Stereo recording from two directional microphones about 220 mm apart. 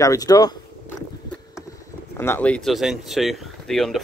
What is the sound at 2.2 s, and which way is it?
Speech, 10° left (ahead or behind).